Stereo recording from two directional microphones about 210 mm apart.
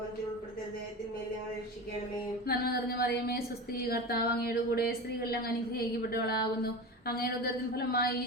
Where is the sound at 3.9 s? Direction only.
45° left (ahead or behind).